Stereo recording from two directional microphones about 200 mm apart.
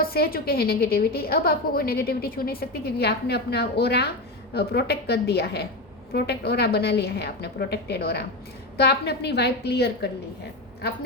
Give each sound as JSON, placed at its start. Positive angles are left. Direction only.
{"t": 0.0, "sound": "a woman's voice", "side_deg": 50}